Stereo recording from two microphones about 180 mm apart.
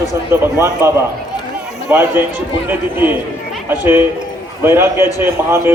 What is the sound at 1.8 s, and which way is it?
Speech, 10° right (ahead or behind).